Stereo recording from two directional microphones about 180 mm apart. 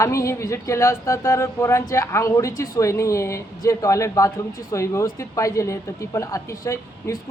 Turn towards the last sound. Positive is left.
turn(degrees=15)  # may be behind; listen again after turning